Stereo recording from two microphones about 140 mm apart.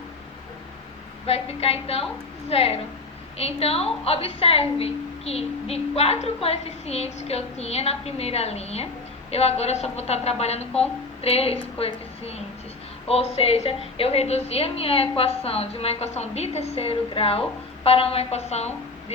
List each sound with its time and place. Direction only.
1.3 s a woman's voice: 45° left (ahead or behind)